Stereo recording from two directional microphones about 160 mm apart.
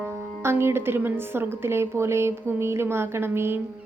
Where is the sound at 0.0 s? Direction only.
15° right (ahead or behind).